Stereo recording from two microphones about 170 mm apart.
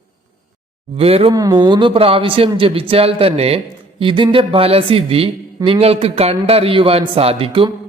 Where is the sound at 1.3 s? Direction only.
20° right (ahead or behind).